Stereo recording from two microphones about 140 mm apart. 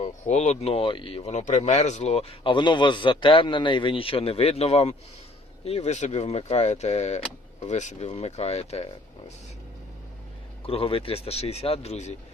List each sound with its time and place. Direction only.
0.0 s speech: 50° left (ahead or behind)
10.7 s speech: 45° left (ahead or behind)